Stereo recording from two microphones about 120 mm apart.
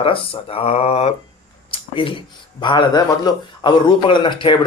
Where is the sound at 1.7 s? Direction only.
45° left (ahead or behind).